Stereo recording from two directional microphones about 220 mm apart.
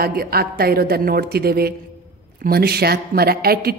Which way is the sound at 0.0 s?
45° right (ahead or behind).